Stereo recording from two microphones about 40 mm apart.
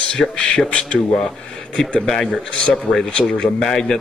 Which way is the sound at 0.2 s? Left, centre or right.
Left.